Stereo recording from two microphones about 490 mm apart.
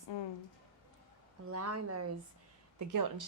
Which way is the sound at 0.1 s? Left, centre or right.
Left.